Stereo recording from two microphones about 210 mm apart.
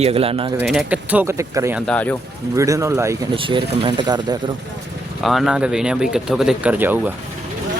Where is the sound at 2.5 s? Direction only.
15° right (ahead or behind).